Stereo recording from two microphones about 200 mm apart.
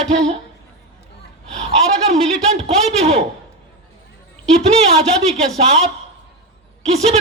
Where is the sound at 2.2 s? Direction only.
30° right (ahead or behind).